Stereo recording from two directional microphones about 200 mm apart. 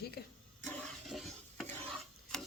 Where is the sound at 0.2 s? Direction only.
55° left (ahead or behind).